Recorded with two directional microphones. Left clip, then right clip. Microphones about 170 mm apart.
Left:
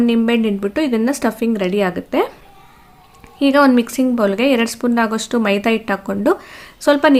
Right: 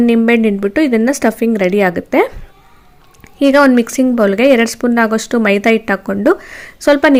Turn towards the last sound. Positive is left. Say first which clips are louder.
# right 3 dB
turn(degrees=-25)  # may be behind; listen again after turning